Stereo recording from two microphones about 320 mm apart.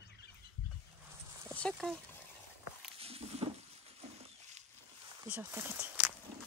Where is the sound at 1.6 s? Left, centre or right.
Centre.